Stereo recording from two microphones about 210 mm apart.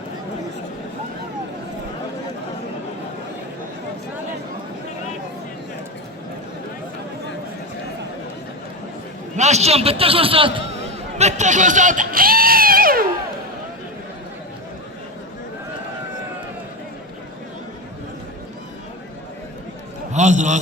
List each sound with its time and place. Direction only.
9.3 s a man's voice: 30° right (ahead or behind)
20.1 s a man's voice: 35° right (ahead or behind)